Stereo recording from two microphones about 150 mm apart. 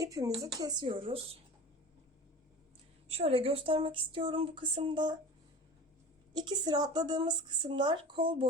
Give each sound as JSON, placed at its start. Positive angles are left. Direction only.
{"t": 0.0, "sound": "speech", "side_deg": -25}
{"t": 3.1, "sound": "speech", "side_deg": -40}
{"t": 6.3, "sound": "speech", "side_deg": -30}